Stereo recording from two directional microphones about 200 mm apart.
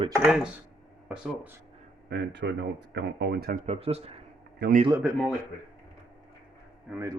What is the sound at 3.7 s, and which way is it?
Speech, 30° right (ahead or behind).